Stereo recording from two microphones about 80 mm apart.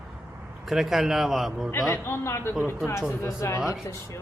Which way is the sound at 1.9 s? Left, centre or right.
Left.